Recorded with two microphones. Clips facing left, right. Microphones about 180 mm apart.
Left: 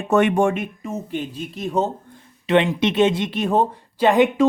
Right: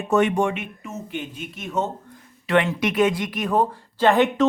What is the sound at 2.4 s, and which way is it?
Speech, 20° left (ahead or behind).